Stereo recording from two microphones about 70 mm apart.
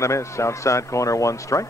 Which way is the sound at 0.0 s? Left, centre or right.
Left.